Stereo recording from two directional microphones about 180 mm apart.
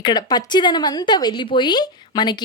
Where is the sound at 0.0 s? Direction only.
25° left (ahead or behind).